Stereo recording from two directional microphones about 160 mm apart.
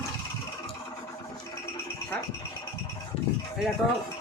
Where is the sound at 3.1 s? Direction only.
40° left (ahead or behind).